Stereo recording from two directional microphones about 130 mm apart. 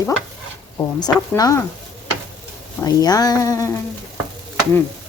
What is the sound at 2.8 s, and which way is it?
Speech, 30° left (ahead or behind).